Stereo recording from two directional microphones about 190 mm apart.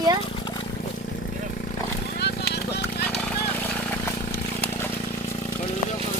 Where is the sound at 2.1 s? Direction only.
60° left (ahead or behind).